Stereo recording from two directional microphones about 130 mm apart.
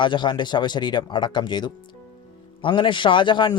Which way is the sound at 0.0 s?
35° left (ahead or behind).